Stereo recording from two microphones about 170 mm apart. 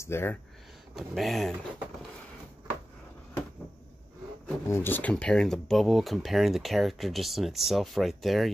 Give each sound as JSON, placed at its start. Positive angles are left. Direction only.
{"t": 0.0, "sound": "speech", "side_deg": 15}
{"t": 0.9, "sound": "speech", "side_deg": 0}
{"t": 4.6, "sound": "speech", "side_deg": 15}